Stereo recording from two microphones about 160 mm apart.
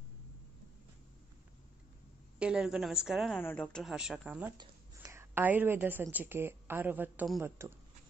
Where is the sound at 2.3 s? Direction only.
5° right (ahead or behind).